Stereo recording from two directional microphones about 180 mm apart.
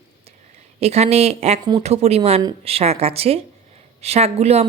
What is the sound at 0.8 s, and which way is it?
A woman's voice, 35° right (ahead or behind).